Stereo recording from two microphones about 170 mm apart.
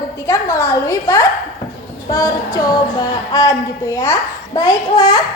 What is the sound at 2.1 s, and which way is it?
Music, 20° left (ahead or behind).